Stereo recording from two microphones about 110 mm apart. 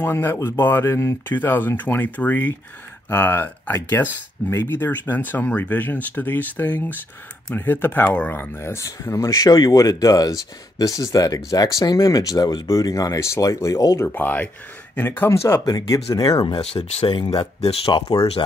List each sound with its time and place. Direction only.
0.0 s speech: 20° left (ahead or behind)
14.0 s speech: 15° left (ahead or behind); by 17.9 s 60° left (ahead or behind)